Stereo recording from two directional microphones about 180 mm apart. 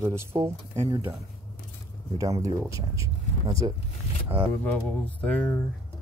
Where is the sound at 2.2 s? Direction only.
20° right (ahead or behind).